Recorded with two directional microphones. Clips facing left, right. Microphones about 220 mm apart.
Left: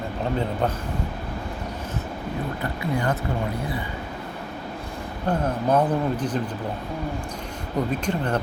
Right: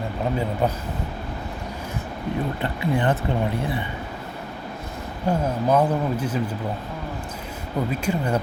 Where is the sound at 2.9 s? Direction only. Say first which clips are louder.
Right 3 dB; 30° right (ahead or behind).